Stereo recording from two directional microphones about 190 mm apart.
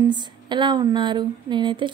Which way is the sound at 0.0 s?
25° right (ahead or behind).